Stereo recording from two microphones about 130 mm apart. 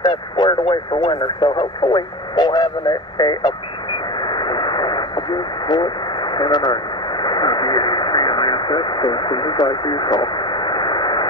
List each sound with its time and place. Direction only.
0.0 s speech: 35° left (ahead or behind)
3.2 s radio: 35° left (ahead or behind)